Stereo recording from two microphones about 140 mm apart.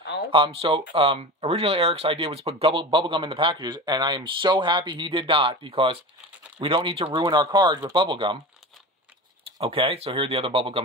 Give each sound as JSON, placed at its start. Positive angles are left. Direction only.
{"t": 0.3, "sound": "speech", "side_deg": -40}
{"t": 9.6, "sound": "speech", "side_deg": -45}